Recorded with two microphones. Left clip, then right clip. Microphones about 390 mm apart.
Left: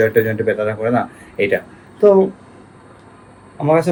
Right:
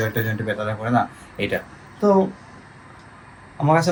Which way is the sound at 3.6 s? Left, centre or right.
Centre.